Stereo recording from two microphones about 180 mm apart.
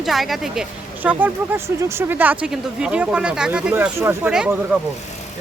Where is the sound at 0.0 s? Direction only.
Centre (ahead or behind).